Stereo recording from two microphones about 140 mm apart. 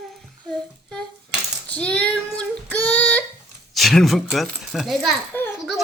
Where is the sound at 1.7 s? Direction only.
10° left (ahead or behind).